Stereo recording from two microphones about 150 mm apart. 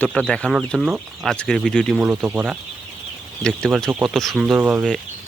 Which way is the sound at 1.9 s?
10° right (ahead or behind).